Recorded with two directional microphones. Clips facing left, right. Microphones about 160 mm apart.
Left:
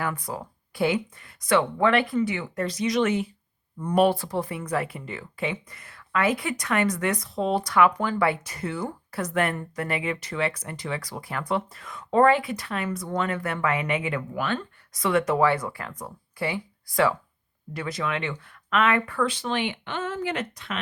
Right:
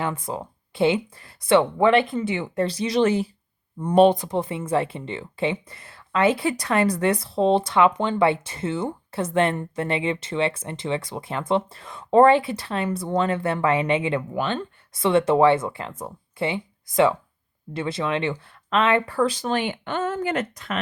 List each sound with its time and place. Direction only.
0.0 s speech: 25° right (ahead or behind); by 20.7 s 45° right (ahead or behind)